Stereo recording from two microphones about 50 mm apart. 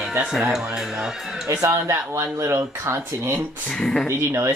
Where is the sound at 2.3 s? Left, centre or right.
Right.